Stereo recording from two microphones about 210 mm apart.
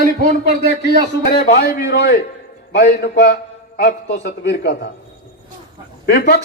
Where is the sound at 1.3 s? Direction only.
50° left (ahead or behind).